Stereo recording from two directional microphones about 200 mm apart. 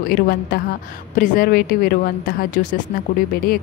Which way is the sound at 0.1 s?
50° left (ahead or behind).